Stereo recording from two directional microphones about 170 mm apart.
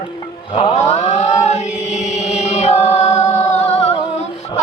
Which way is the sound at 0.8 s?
40° left (ahead or behind).